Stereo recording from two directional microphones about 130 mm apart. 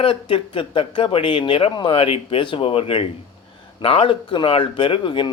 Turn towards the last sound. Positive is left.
turn(degrees=40)  # may be behind; listen again after turning